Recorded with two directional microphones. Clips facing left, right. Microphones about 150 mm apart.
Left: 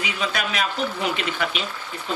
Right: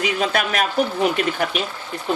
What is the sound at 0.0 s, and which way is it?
Speech, 55° right (ahead or behind).